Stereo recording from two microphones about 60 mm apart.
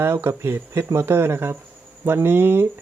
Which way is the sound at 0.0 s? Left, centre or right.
Right.